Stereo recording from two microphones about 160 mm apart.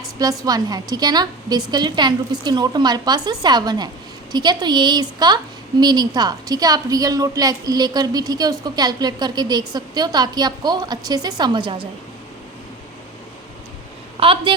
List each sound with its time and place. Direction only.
0.2 s a woman's voice: 25° right (ahead or behind)
14.2 s a woman's voice: 35° right (ahead or behind)